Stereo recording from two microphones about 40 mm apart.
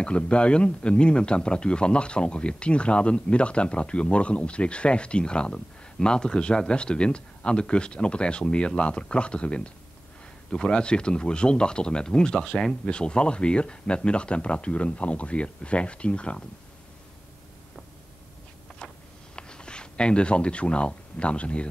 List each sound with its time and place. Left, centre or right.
0.0 s speech: left; by 12.7 s centre
12.8 s speech: left
18.8 s a sound: left
19.3 s speech: left